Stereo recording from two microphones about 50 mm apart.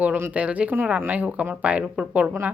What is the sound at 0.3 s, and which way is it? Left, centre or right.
Speech, right.